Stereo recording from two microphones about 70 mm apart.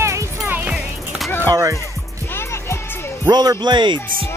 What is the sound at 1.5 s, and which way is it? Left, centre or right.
Music, right.